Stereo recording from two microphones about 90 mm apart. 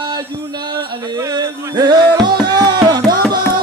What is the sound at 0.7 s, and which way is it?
Music, 50° right (ahead or behind).